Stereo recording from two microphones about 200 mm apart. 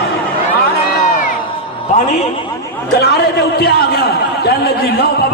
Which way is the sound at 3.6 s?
55° left (ahead or behind).